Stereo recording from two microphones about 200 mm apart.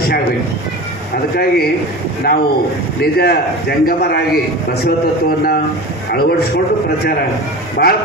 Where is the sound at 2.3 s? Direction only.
50° left (ahead or behind).